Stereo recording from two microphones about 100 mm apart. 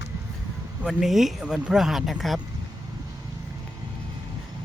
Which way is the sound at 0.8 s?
5° right (ahead or behind).